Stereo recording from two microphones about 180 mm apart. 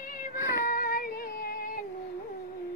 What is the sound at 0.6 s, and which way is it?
Child singing, 50° left (ahead or behind).